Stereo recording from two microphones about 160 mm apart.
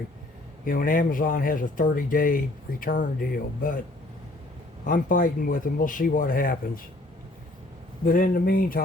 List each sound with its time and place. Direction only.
0.6 s speech: 60° left (ahead or behind)
4.9 s speech: 60° left (ahead or behind)
8.0 s speech: 60° left (ahead or behind)